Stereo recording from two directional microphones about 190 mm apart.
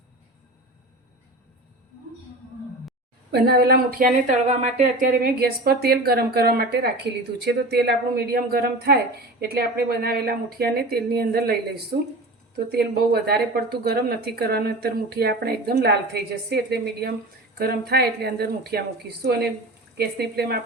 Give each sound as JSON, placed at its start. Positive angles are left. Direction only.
{"t": 3.3, "sound": "a woman's voice", "side_deg": -55}